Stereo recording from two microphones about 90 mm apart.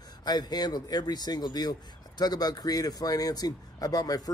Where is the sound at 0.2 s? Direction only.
50° left (ahead or behind).